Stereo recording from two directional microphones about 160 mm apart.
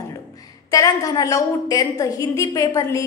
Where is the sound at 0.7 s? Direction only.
20° left (ahead or behind).